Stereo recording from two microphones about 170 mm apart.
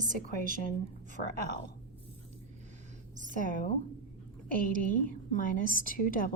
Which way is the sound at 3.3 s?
50° left (ahead or behind).